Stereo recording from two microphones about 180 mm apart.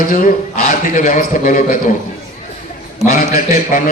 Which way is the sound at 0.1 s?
50° left (ahead or behind).